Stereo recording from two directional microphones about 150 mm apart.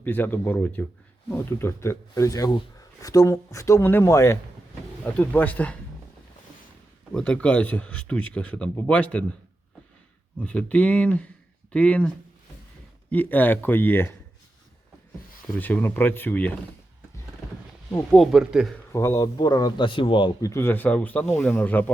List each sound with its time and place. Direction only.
0.0 s a man's voice: 10° left (ahead or behind)
7.1 s speech: 5° left (ahead or behind)
10.4 s speech: 10° left (ahead or behind)
15.5 s speech: 10° left (ahead or behind)
18.1 s speech: centre (ahead or behind)
18.9 s a man's voice: 20° left (ahead or behind); by 20.5 s 35° left (ahead or behind)
20.5 s speech: 15° left (ahead or behind)